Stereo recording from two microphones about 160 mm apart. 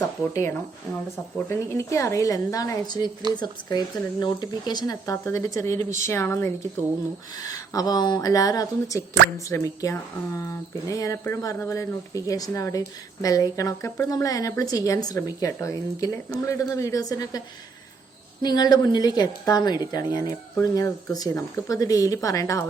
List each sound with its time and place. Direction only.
1.5 s speech: 15° left (ahead or behind)
18.4 s speech: 25° left (ahead or behind)